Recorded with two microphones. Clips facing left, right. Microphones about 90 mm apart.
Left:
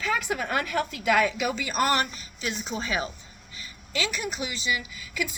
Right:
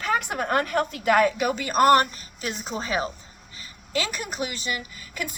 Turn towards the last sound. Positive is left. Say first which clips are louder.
# left 1 dB
turn(degrees=-45)  # may be behind; listen again after turning